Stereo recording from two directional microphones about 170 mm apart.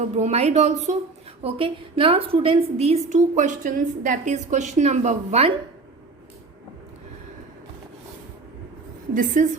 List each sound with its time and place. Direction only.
0.0 s a woman's voice: 40° right (ahead or behind)
9.1 s a woman's voice: 50° right (ahead or behind)